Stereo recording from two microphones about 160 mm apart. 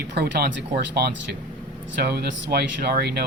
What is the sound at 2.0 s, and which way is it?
Speech, 90° right.